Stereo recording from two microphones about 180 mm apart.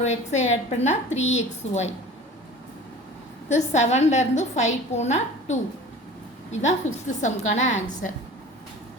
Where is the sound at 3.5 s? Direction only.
40° left (ahead or behind).